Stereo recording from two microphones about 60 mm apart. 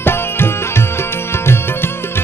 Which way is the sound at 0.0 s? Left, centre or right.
Left.